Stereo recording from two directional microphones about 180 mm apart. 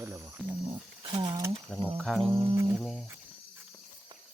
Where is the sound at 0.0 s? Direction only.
15° right (ahead or behind).